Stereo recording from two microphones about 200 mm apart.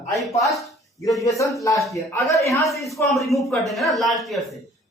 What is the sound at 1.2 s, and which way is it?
Speech, 15° left (ahead or behind).